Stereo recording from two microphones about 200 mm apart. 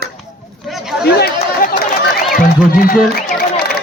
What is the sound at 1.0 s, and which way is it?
Chatter, 50° left (ahead or behind).